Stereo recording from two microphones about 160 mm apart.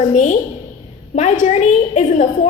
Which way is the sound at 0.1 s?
50° left (ahead or behind).